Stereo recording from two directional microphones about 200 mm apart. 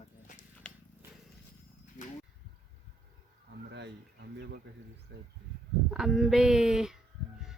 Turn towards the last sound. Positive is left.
turn(degrees=-5)  # may be behind; listen again after turning